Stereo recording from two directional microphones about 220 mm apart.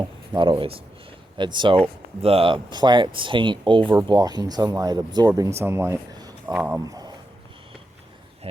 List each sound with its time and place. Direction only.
0.0 s speech: 20° right (ahead or behind)